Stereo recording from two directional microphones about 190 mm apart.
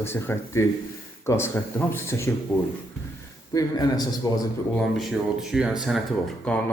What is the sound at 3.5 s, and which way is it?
Speech, 20° left (ahead or behind).